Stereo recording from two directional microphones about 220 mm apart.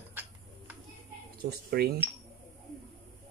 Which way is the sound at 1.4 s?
45° right (ahead or behind).